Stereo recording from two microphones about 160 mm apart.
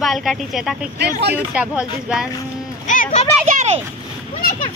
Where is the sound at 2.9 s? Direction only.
50° left (ahead or behind).